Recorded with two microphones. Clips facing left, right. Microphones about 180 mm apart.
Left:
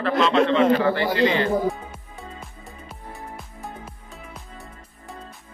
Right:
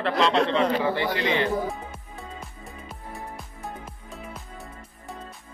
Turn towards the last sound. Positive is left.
turn(degrees=0)  # may be behind; listen again after turning